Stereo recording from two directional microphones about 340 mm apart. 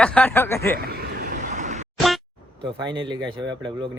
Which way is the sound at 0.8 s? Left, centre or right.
Right.